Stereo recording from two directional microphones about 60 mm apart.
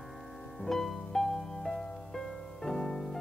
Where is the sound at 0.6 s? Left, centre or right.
Centre.